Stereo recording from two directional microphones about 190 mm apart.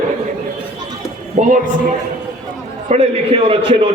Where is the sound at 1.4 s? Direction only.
35° right (ahead or behind).